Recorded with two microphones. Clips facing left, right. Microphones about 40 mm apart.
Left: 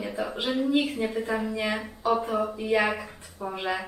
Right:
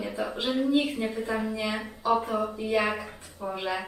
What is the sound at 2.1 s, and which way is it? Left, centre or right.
Speech, centre.